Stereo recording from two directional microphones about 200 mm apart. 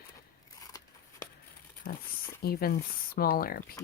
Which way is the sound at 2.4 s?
50° left (ahead or behind).